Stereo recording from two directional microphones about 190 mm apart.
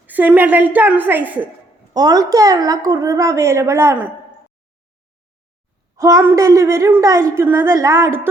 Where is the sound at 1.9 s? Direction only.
20° right (ahead or behind).